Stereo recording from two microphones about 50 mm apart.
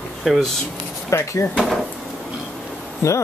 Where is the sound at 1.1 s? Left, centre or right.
Left.